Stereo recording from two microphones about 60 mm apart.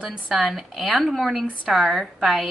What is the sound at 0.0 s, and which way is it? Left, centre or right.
A woman's voice, centre.